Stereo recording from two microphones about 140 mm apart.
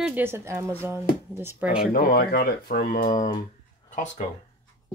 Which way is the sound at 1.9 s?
90° left.